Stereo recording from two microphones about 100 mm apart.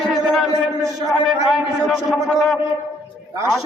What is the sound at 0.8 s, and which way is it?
Speech, 35° right (ahead or behind).